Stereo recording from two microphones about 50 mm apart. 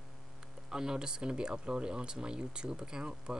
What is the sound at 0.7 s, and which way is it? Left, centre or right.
Speech, centre.